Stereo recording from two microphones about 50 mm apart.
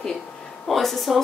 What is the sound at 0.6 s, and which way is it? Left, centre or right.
Speech, centre.